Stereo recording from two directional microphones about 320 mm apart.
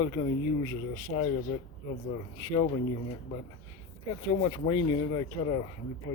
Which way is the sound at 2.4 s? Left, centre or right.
Centre.